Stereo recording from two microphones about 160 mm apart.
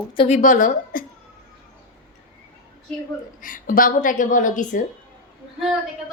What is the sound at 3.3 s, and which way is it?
A woman's voice, 60° left (ahead or behind).